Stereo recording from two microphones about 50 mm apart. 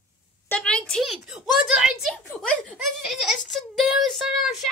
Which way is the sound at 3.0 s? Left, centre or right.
Centre.